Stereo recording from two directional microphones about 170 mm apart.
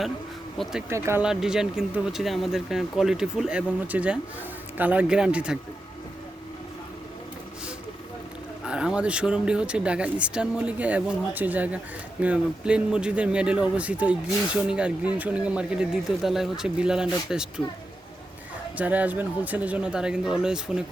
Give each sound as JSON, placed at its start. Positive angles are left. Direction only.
{"t": 0.6, "sound": "speech", "side_deg": -5}
{"t": 0.9, "sound": "speech", "side_deg": -15}
{"t": 1.2, "sound": "speech", "side_deg": -5}
{"t": 8.6, "sound": "speech", "side_deg": -5}
{"t": 18.8, "sound": "speech", "side_deg": -10}